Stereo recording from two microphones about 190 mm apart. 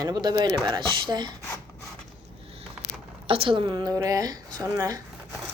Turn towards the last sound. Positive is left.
turn(degrees=-20)  # may be behind; listen again after turning